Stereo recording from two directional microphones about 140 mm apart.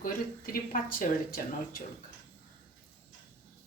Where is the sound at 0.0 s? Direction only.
90° left.